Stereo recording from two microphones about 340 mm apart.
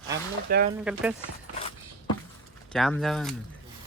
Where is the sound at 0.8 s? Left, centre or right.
Centre.